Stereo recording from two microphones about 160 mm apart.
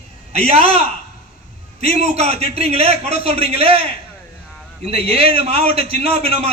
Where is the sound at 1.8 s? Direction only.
40° right (ahead or behind).